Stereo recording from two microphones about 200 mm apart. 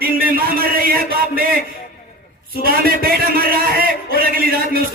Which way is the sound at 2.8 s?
45° right (ahead or behind).